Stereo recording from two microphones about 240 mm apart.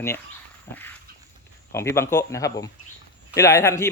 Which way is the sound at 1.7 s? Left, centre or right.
Centre.